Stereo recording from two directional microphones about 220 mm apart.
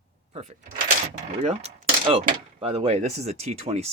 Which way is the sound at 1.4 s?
30° right (ahead or behind).